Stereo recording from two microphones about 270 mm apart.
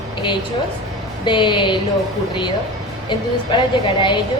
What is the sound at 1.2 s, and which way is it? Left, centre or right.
Speech, centre.